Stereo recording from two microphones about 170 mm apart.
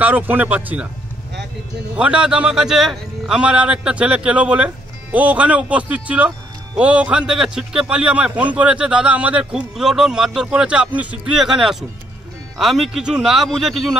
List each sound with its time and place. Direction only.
0.0 s speech: 10° right (ahead or behind)
2.0 s a man's voice: 5° right (ahead or behind)